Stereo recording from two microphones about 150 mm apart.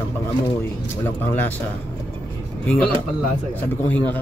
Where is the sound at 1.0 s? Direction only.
10° left (ahead or behind).